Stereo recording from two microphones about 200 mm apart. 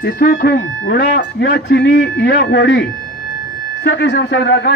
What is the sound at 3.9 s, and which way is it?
Speech, 60° left (ahead or behind).